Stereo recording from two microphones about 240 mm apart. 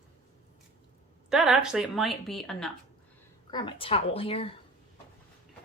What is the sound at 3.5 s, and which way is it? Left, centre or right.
Speech, centre.